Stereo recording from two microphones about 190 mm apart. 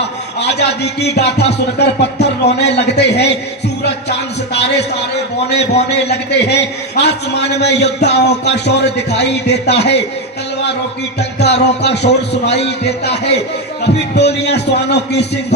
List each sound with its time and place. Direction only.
0.3 s a man's voice: 60° left (ahead or behind)
11.2 s a man's voice: 60° left (ahead or behind)